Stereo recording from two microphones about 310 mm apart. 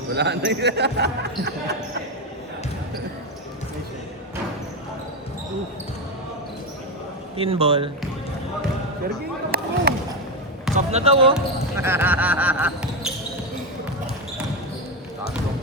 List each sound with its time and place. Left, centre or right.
0.1 s speech: right
7.3 s a man's voice: centre
9.0 s speech: right
10.8 s speech: centre
11.8 s speech: centre